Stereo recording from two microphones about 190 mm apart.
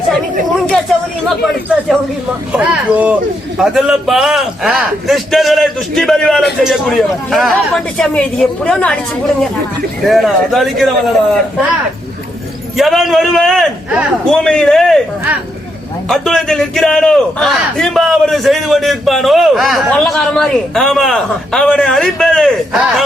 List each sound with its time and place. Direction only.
2.5 s a man's voice: 5° right (ahead or behind)
10.1 s a man's voice: centre (ahead or behind)
12.7 s a man's voice: centre (ahead or behind)
16.0 s a man's voice: centre (ahead or behind)